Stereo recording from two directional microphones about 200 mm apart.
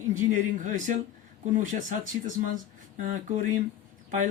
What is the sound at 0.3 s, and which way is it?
Speech, 40° right (ahead or behind).